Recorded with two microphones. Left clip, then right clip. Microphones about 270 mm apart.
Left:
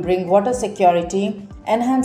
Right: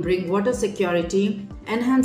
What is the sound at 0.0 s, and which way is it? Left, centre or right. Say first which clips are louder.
A woman's voice: left 6 dB; centre.